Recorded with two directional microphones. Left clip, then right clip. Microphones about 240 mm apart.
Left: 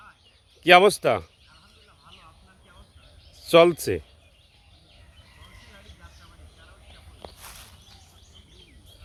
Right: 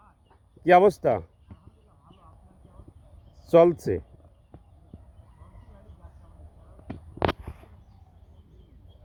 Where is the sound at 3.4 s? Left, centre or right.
Centre.